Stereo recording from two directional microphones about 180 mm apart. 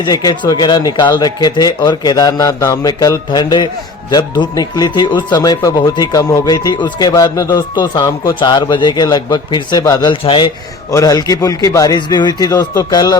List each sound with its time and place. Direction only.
0.0 s speech: 20° left (ahead or behind)